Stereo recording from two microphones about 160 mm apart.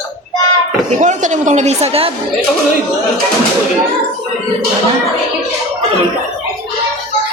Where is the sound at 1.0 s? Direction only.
50° right (ahead or behind).